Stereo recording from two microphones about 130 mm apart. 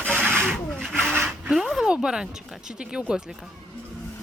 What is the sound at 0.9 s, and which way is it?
Speech, 15° right (ahead or behind).